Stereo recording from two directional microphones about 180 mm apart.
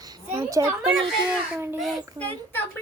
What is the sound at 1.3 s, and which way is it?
Speech, 5° right (ahead or behind).